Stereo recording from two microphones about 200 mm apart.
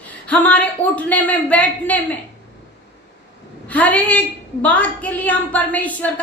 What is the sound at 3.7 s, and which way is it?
A woman's voice, 5° left (ahead or behind).